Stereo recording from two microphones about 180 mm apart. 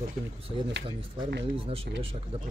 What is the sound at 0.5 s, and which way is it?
Speech, 20° right (ahead or behind).